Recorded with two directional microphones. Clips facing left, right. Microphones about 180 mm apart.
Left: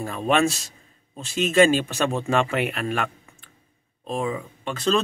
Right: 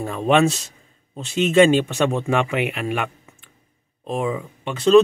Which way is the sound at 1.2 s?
20° right (ahead or behind).